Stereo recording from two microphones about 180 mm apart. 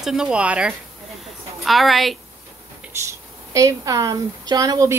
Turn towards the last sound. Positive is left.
turn(degrees=-20)  # may be behind; listen again after turning